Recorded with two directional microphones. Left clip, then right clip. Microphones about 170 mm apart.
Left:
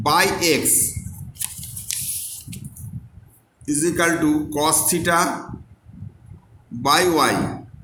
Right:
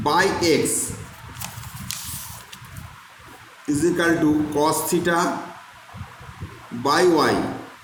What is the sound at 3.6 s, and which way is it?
Speech, 25° left (ahead or behind).